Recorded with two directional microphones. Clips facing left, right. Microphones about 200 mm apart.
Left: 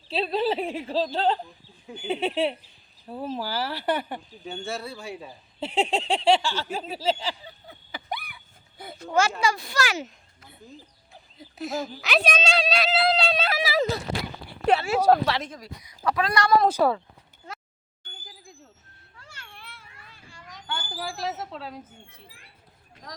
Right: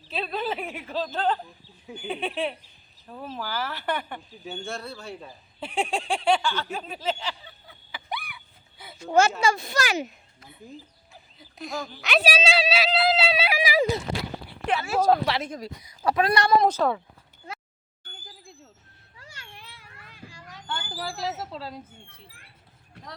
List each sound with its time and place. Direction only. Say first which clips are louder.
0.1 s a sound: left 5 dB; 30° left (ahead or behind)
3.1 s speech: left 4 dB; 35° left (ahead or behind)
4.4 s speech: left 1 dB; centre (ahead or behind)
5.5 s a sound: left 3 dB; 25° left (ahead or behind)
7.7 s a sound: left 1 dB; 40° left (ahead or behind)
9.4 s speech: right 1 dB; 25° right (ahead or behind)
11.5 s speech: left 4 dB; 5° left (ahead or behind); by 14.0 s 15° right (ahead or behind)
14.7 s speech: left 3 dB; 35° left (ahead or behind)
15.3 s speech: even; 15° right (ahead or behind)
16.6 s speech: left 1 dB; 10° left (ahead or behind)
19.1 s a sound: right 1 dB; 15° right (ahead or behind)
20.7 s speech: even; centre (ahead or behind)